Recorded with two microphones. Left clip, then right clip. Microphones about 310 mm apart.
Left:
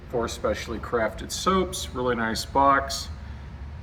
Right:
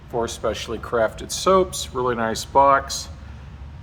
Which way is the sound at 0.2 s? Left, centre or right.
Right.